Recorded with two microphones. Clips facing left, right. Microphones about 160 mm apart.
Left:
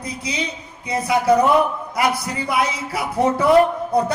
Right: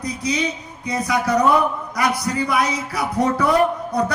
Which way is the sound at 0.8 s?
25° left (ahead or behind).